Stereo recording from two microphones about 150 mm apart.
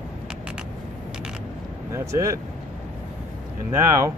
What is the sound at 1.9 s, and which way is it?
Speech, 20° right (ahead or behind).